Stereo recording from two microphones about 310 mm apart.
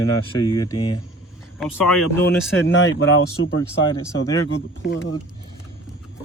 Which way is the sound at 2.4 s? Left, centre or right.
Left.